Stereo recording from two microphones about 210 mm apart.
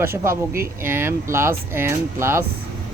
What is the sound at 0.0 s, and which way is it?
Speech, 10° right (ahead or behind).